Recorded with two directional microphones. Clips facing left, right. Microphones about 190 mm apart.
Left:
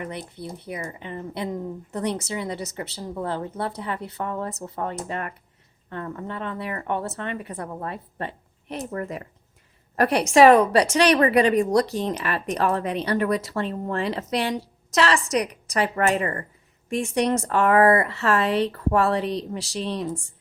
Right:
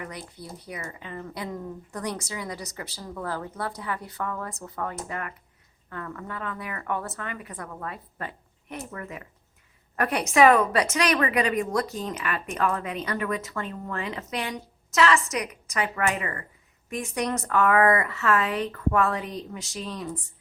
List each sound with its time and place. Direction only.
0.0 s a woman's voice: 25° left (ahead or behind)